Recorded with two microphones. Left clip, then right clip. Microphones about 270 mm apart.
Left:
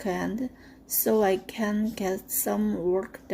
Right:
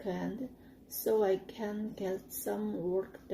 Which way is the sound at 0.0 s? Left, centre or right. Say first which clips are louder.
Left 8 dB; left.